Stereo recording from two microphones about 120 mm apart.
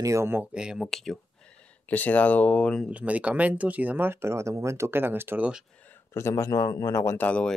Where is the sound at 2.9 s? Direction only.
10° right (ahead or behind).